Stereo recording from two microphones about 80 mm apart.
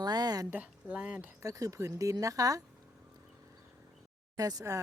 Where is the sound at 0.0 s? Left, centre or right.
Right.